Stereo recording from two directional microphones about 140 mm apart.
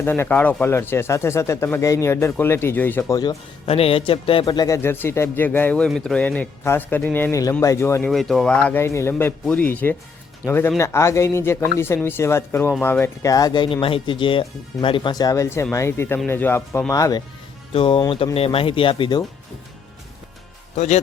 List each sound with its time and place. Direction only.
0.0 s speech: 15° left (ahead or behind)
3.7 s speech: 45° left (ahead or behind)
4.4 s speech: 25° left (ahead or behind)
8.1 s speech: centre (ahead or behind)
13.3 s speech: 30° left (ahead or behind)
17.7 s speech: 40° left (ahead or behind)
20.7 s a man's voice: 55° left (ahead or behind)